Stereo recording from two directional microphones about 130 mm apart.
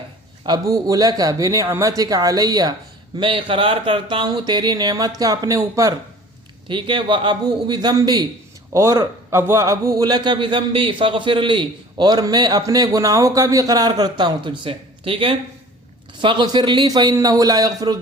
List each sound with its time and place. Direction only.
0.4 s speech: 30° right (ahead or behind)
3.2 s a man's voice: 40° right (ahead or behind)
6.7 s a man's voice: 40° right (ahead or behind)
8.7 s a man's voice: 20° right (ahead or behind)